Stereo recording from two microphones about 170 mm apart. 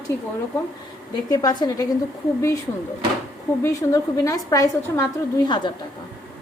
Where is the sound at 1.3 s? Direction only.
20° left (ahead or behind).